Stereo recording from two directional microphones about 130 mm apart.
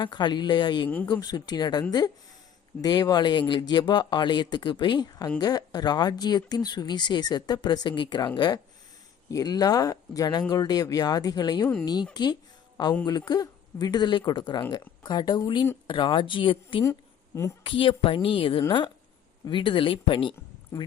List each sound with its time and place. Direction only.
0.0 s speech: 35° left (ahead or behind)
2.8 s a woman's voice: 30° left (ahead or behind)
16.8 s a sound: 20° left (ahead or behind)
17.6 s a woman's voice: 40° left (ahead or behind)